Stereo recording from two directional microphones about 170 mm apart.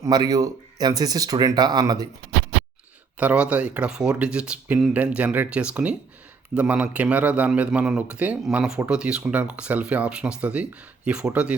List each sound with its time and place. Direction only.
0.0 s speech: 25° right (ahead or behind)
3.2 s speech: 5° right (ahead or behind)